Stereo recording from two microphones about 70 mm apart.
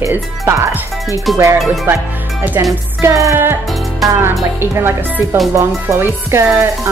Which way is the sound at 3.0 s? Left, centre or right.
Right.